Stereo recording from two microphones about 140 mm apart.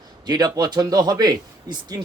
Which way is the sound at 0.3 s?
30° right (ahead or behind).